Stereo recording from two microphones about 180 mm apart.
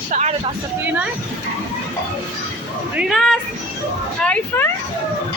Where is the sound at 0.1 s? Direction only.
40° right (ahead or behind).